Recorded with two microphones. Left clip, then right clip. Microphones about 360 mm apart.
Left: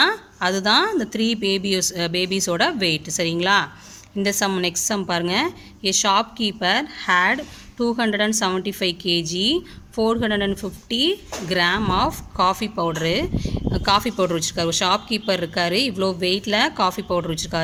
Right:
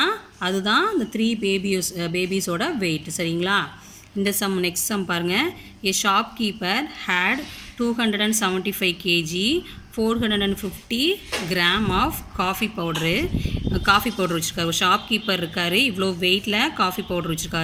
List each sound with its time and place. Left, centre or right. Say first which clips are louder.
0.0 s a woman's voice: left 4 dB; left